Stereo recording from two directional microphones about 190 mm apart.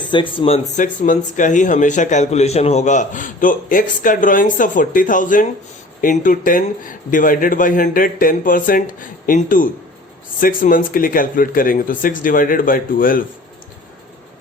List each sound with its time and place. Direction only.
0.1 s speech: 25° left (ahead or behind); by 13.2 s 45° left (ahead or behind)